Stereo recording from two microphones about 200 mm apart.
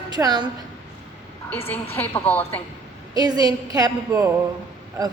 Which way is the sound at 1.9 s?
10° left (ahead or behind).